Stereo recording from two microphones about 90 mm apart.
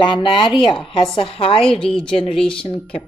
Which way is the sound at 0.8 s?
75° left (ahead or behind).